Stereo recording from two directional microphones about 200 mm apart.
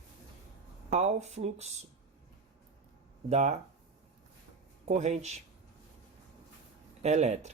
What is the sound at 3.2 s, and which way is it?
Speech, 35° right (ahead or behind).